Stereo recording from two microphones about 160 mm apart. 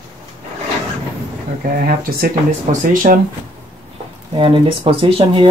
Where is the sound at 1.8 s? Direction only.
60° right (ahead or behind).